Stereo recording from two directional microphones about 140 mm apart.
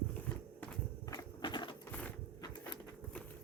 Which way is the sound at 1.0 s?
25° left (ahead or behind).